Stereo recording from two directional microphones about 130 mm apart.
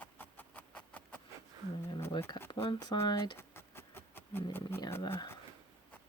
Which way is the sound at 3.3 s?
20° left (ahead or behind).